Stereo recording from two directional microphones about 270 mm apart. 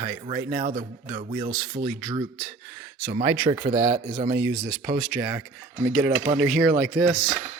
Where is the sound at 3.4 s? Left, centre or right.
Centre.